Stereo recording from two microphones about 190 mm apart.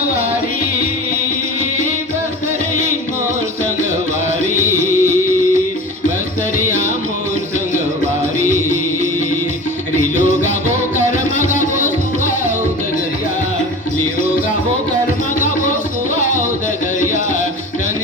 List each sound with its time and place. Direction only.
4.5 s music: 45° left (ahead or behind)
6.7 s music: 40° left (ahead or behind)
8.4 s music: 40° left (ahead or behind)
10.9 s music: 40° left (ahead or behind)